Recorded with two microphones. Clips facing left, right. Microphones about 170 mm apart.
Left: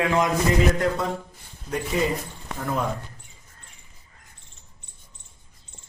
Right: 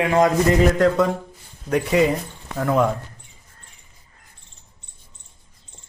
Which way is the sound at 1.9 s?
80° right.